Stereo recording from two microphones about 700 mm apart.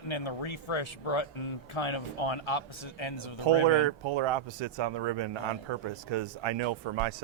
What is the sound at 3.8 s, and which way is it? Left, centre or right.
A man's voice, right.